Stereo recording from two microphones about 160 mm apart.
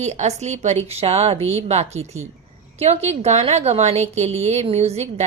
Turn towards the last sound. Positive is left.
turn(degrees=-40)  # may be behind; listen again after turning